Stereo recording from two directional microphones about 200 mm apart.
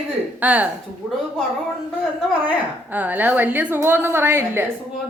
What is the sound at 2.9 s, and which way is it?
A woman's voice, 10° right (ahead or behind).